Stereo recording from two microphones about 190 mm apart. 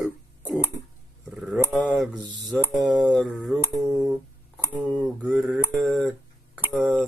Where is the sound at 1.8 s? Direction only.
Centre (ahead or behind).